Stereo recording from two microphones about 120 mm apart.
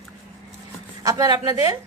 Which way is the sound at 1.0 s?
30° right (ahead or behind).